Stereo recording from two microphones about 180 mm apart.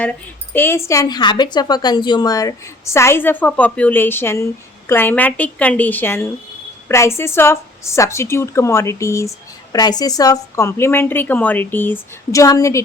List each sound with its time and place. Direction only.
0.5 s a woman's voice: 15° left (ahead or behind)